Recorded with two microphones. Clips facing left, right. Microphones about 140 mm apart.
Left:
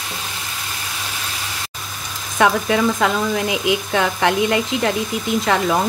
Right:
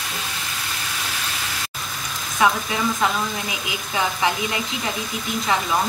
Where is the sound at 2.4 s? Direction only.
80° left.